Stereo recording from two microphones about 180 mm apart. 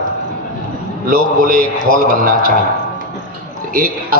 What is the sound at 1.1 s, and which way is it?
A man's voice, 50° right (ahead or behind).